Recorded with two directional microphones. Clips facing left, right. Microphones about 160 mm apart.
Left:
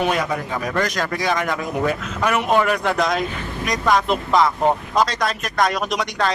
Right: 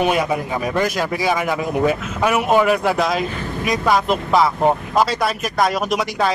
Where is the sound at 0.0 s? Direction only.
10° right (ahead or behind).